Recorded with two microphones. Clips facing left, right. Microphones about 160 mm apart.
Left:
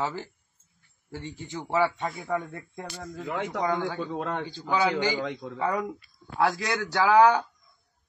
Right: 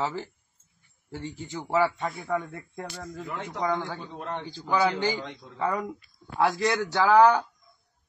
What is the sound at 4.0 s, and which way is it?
A man's voice, 60° left (ahead or behind).